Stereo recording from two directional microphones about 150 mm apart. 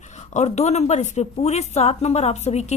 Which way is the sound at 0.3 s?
50° left (ahead or behind).